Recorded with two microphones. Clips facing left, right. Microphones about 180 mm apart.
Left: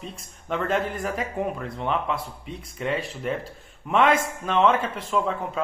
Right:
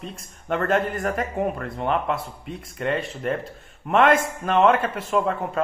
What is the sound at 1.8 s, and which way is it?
Speech, 50° right (ahead or behind).